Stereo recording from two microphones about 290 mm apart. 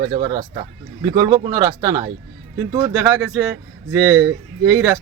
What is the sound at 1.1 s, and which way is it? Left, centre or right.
Speech, centre.